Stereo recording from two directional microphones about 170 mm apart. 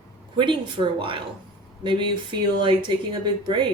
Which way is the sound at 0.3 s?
30° right (ahead or behind).